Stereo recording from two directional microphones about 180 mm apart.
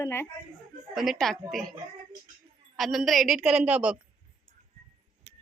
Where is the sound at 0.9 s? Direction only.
Centre (ahead or behind).